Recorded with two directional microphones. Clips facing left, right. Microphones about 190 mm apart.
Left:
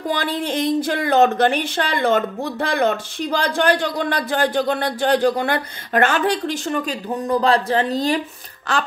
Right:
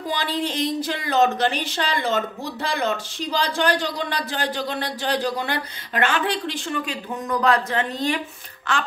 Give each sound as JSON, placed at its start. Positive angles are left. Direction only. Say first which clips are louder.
{"t": 0.1, "sound": "speech", "louder": "left 3 dB", "side_deg": 55}